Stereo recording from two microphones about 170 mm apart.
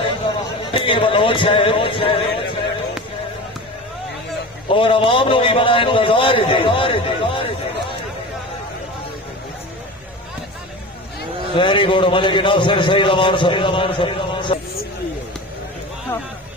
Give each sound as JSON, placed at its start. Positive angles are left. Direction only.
{"t": 0.7, "sound": "a man's voice", "side_deg": 30}
{"t": 4.6, "sound": "a man's voice", "side_deg": 30}
{"t": 11.5, "sound": "a man's voice", "side_deg": 30}